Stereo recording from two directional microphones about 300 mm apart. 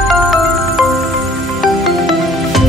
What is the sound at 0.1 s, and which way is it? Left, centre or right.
Music, centre.